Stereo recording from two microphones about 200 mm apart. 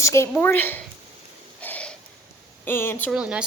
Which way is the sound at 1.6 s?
5° left (ahead or behind).